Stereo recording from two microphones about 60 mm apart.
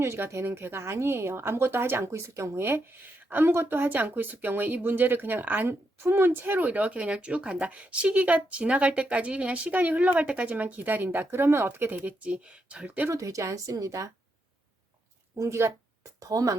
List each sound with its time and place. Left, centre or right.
0.0 s a woman's voice: right
2.0 s a woman's voice: right
3.4 s speech: right
12.2 s speech: centre
13.1 s speech: right
15.4 s a woman's voice: right
16.2 s speech: right